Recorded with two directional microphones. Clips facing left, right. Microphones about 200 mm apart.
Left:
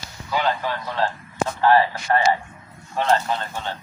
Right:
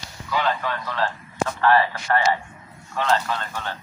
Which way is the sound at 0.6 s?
25° left (ahead or behind).